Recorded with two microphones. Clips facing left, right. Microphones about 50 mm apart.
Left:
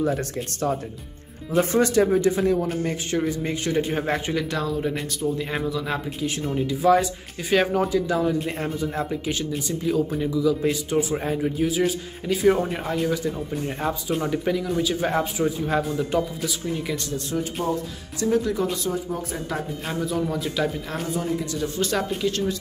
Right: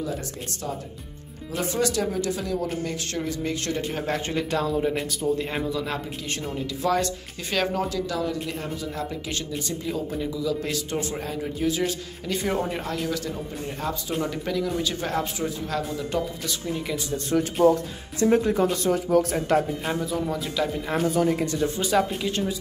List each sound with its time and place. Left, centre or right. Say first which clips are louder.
0.0 s speech: left 6 dB; left
1.5 s speech: left 6 dB; left
4.4 s speech: right 1 dB; centre
6.6 s a man's voice: left 6 dB; centre
13.7 s speech: left 3 dB; left
14.3 s a man's voice: left 3 dB; centre
17.6 s speech: right 9 dB; right
18.2 s speech: right 2 dB; right
18.9 s speech: right 6 dB; right
20.0 s speech: left 2 dB; centre
21.1 s speech: right 2 dB; right
21.5 s speech: right 2 dB; right
21.8 s speech: even; centre